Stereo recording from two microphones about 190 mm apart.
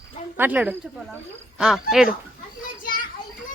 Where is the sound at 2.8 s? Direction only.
45° left (ahead or behind).